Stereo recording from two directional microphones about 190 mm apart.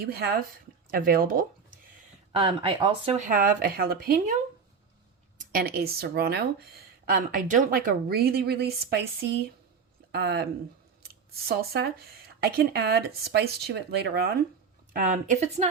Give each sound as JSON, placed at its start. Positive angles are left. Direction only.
{"t": 0.0, "sound": "speech", "side_deg": -55}
{"t": 2.3, "sound": "speech", "side_deg": -25}
{"t": 3.2, "sound": "speech", "side_deg": -45}
{"t": 5.4, "sound": "speech", "side_deg": -50}
{"t": 14.9, "sound": "speech", "side_deg": -45}